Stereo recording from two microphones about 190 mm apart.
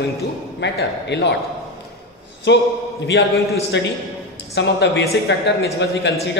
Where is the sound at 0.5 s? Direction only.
65° left (ahead or behind).